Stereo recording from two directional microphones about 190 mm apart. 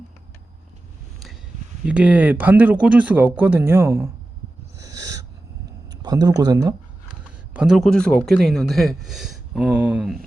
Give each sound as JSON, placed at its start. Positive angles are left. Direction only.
{"t": 1.8, "sound": "speech", "side_deg": -5}
{"t": 4.8, "sound": "owl", "side_deg": -20}
{"t": 6.0, "sound": "speech", "side_deg": -20}
{"t": 7.5, "sound": "speech", "side_deg": -5}